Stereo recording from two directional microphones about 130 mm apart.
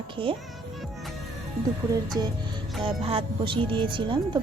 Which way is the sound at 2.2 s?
30° right (ahead or behind).